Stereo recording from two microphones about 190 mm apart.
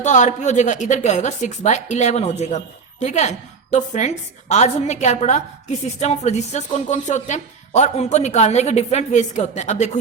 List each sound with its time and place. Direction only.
0.0 s a woman's voice: 40° left (ahead or behind)